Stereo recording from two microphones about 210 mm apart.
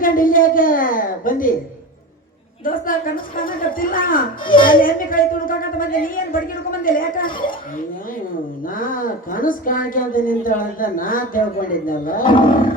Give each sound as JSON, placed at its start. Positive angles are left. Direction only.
{"t": 0.0, "sound": "a sound", "side_deg": 40}
{"t": 2.6, "sound": "speech", "side_deg": 40}
{"t": 8.6, "sound": "speech", "side_deg": 40}
{"t": 12.2, "sound": "roaring cats", "side_deg": 25}